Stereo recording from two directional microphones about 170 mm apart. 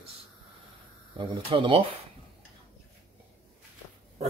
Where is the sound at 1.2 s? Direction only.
30° right (ahead or behind).